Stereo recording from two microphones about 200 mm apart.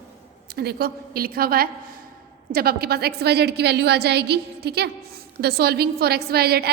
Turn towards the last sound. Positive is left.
turn(degrees=-55)  # may be behind; listen again after turning